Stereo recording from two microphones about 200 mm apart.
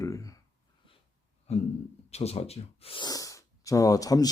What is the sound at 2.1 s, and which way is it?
Speech, 30° left (ahead or behind).